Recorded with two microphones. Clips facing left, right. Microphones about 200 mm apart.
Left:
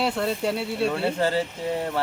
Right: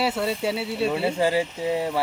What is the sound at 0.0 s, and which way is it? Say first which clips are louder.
Speech: even; 5° right (ahead or behind).